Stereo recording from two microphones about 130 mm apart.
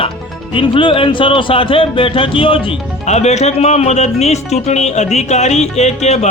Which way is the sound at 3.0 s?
60° left (ahead or behind).